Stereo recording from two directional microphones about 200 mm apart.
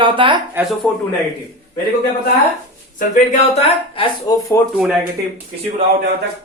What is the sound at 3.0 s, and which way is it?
Speech, 35° left (ahead or behind).